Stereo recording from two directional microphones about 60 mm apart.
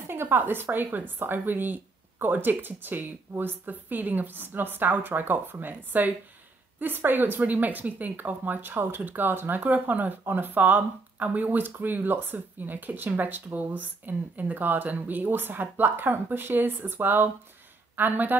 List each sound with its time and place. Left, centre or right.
0.0 s a woman's voice: right